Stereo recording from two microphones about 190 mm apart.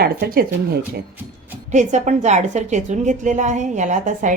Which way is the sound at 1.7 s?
40° right (ahead or behind).